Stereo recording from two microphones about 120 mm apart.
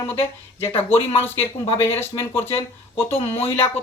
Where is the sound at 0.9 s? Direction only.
20° left (ahead or behind).